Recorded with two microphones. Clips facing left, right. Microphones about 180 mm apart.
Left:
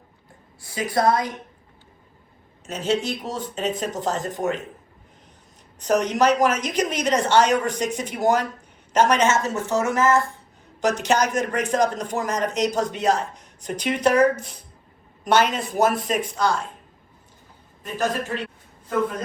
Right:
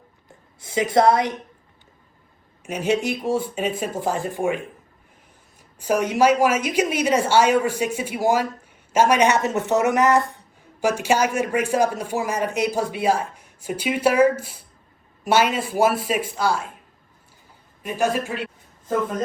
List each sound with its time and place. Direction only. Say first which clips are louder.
0.6 s speech: right 4 dB; 20° right (ahead or behind)
2.6 s speech: right 2 dB; 10° right (ahead or behind)
5.8 s speech: right 1 dB; 10° right (ahead or behind)
17.8 s speech: right 3 dB; 10° right (ahead or behind)